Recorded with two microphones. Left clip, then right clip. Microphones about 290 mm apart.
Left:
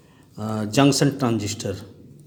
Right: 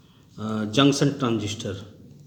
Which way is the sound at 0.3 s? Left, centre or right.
Left.